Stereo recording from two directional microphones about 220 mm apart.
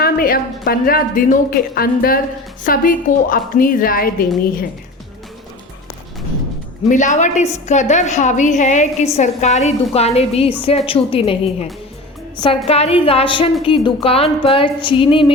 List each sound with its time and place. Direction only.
0.0 s a woman's voice: 40° left (ahead or behind)
6.8 s a woman's voice: 35° left (ahead or behind)